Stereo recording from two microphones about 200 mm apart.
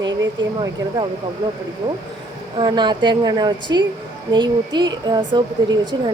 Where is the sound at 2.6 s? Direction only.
20° right (ahead or behind).